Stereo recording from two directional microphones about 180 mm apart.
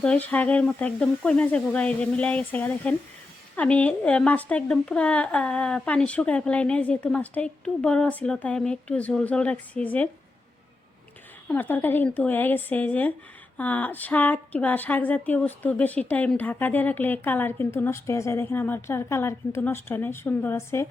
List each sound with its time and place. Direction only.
0.0 s speech: 5° left (ahead or behind)
11.4 s speech: 10° left (ahead or behind)